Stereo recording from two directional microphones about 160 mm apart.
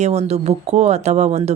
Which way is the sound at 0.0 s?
40° right (ahead or behind).